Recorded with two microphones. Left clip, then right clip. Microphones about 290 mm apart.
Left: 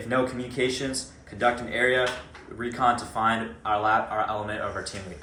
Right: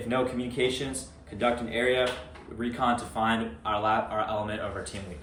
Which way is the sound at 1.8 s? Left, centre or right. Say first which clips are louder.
Left 2 dB; centre.